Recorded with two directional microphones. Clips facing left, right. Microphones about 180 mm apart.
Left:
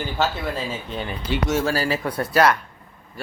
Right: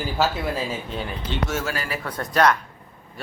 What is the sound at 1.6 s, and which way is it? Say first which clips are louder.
Speech: left 6 dB; 35° left (ahead or behind).